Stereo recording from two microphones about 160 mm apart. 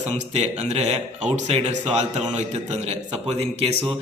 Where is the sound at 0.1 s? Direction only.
45° right (ahead or behind).